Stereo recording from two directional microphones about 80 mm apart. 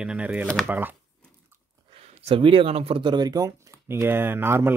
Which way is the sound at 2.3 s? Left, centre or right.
Right.